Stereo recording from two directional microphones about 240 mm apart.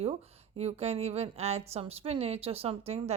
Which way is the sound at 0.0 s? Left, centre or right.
Right.